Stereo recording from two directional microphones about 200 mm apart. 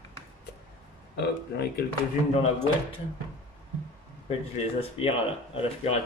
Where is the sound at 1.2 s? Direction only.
55° left (ahead or behind).